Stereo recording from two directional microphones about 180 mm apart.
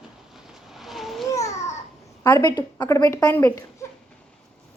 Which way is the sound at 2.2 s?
15° left (ahead or behind).